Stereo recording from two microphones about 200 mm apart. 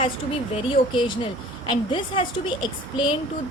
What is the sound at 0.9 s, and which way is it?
A woman's voice, 25° left (ahead or behind).